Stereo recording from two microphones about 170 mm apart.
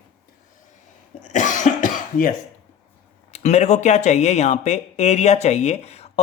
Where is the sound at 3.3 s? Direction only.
40° left (ahead or behind).